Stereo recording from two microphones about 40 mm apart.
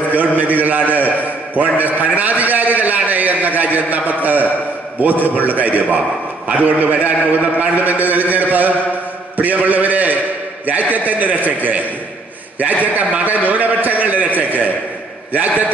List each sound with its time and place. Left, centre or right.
0.1 s a man's voice: right